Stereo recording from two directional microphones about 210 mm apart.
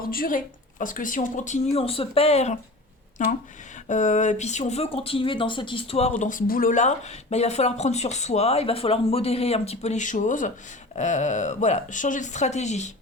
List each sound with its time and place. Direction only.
0.0 s speech: 45° left (ahead or behind)